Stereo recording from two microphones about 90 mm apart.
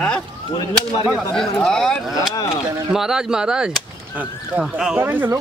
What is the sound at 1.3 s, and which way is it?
Speech, 5° left (ahead or behind).